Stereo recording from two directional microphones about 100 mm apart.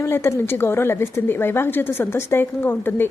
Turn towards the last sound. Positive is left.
turn(degrees=20)  # may be behind; listen again after turning